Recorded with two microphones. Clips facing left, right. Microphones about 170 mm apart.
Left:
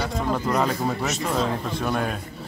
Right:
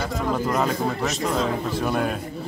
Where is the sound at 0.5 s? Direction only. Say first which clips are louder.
Even; centre (ahead or behind).